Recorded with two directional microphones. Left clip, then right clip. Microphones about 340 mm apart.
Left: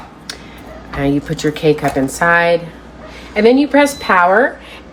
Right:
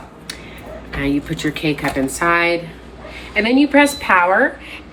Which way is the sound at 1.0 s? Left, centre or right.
Left.